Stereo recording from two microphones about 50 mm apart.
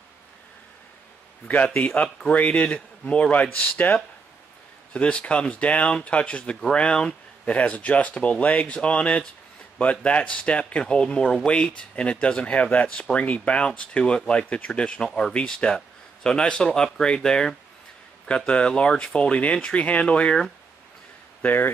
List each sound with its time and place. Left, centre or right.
1.8 s speech: left
4.9 s speech: left
21.4 s speech: left